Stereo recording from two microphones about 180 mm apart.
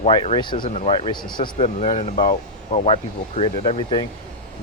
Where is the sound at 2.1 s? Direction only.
50° left (ahead or behind).